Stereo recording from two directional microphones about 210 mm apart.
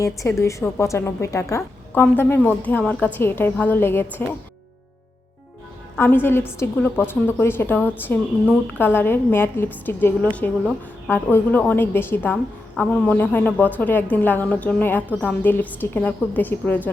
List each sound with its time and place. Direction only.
0.0 s a woman's voice: 15° left (ahead or behind)
6.0 s a woman's voice: 10° left (ahead or behind)